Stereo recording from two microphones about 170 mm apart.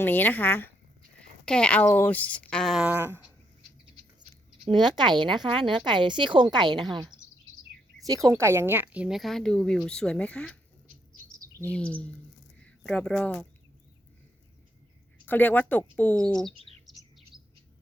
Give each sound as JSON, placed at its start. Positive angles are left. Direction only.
{"t": 0.0, "sound": "speech", "side_deg": 10}
{"t": 4.6, "sound": "speech", "side_deg": -25}
{"t": 8.0, "sound": "speech", "side_deg": -20}
{"t": 11.6, "sound": "speech", "side_deg": 5}
{"t": 15.3, "sound": "speech", "side_deg": 10}
{"t": 16.5, "sound": "bird", "side_deg": -35}